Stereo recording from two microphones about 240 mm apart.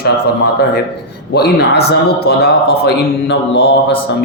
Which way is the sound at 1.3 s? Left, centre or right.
Left.